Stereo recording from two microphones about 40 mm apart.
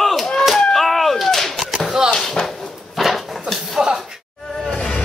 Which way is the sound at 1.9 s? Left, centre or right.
Centre.